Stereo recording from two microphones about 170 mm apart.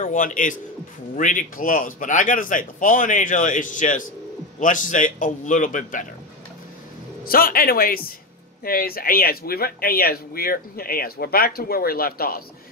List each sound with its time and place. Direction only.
0.0 s speech: 50° left (ahead or behind)
7.2 s speech: 60° left (ahead or behind)